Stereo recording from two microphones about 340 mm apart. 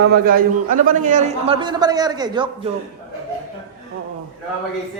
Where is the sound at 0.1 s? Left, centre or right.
Right.